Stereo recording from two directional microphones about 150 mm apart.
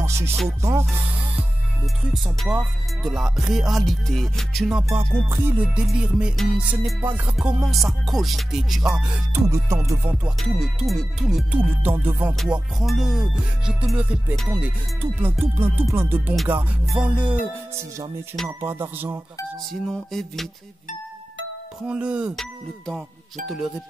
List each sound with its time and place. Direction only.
0.0 s music: 15° right (ahead or behind); by 4.8 s centre (ahead or behind)
4.8 s speech: 15° right (ahead or behind)
7.2 s music: 10° right (ahead or behind)
9.1 s speech: 15° right (ahead or behind)
10.2 s music: centre (ahead or behind)
11.8 s speech: 15° right (ahead or behind)
12.4 s music: 5° right (ahead or behind)
14.6 s speech: 10° right (ahead or behind)
16.8 s music: 5° right (ahead or behind)
18.6 s speech: 15° right (ahead or behind)
19.7 s music: centre (ahead or behind)
21.8 s speech: 5° right (ahead or behind)